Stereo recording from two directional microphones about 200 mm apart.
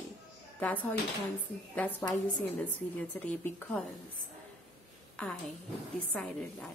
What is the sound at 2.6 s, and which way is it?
A woman's voice, 10° left (ahead or behind).